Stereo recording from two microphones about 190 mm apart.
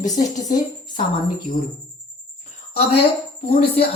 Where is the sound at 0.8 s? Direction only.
25° left (ahead or behind).